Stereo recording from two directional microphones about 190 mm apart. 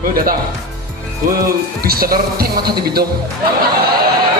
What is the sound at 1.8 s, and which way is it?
Speech, 50° right (ahead or behind).